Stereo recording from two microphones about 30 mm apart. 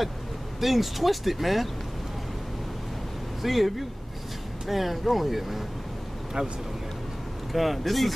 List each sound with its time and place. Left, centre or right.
0.6 s speech: centre
3.4 s speech: centre
7.5 s speech: centre